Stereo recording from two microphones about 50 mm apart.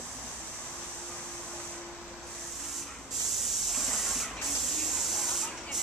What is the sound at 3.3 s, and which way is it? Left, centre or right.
Spray, centre.